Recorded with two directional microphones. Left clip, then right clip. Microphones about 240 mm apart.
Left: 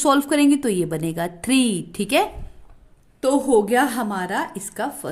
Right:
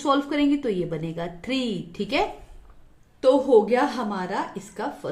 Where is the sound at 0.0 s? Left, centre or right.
Left.